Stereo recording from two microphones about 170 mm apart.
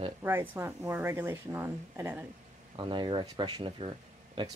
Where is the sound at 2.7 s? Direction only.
25° right (ahead or behind).